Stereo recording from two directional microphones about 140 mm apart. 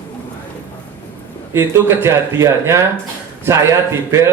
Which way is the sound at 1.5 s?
20° right (ahead or behind).